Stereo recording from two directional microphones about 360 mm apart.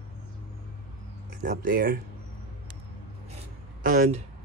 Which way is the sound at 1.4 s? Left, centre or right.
Right.